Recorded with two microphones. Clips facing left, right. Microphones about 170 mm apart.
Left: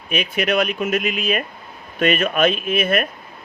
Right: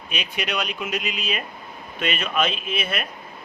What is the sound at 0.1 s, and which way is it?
Speech, 50° left (ahead or behind).